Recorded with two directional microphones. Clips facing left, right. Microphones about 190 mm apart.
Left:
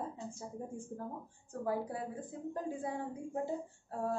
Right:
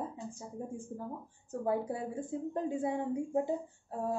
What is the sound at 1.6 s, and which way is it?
A woman's voice, 25° right (ahead or behind).